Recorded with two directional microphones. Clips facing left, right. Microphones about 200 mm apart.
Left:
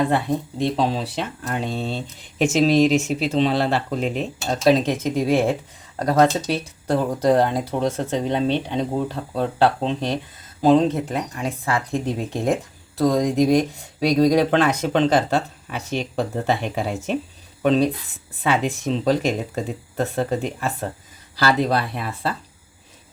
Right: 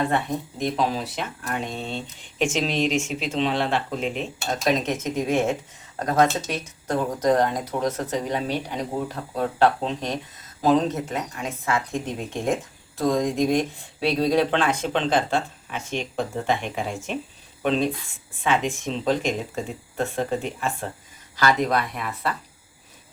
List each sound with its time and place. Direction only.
0.6 s speech: 30° left (ahead or behind)